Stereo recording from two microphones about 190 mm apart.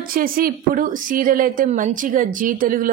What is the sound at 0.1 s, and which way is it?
A woman's voice, 50° right (ahead or behind).